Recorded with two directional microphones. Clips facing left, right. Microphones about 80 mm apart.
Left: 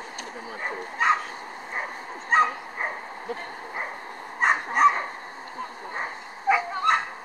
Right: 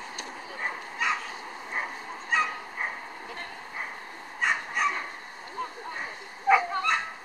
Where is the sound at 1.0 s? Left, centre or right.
Left.